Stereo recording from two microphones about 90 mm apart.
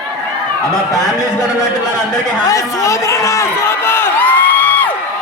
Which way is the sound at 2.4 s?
40° left (ahead or behind).